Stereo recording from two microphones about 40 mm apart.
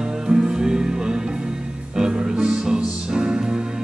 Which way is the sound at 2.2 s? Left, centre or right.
Right.